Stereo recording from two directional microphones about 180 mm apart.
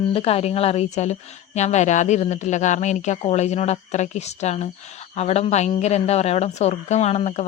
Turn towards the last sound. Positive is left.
turn(degrees=40)  # may be behind; listen again after turning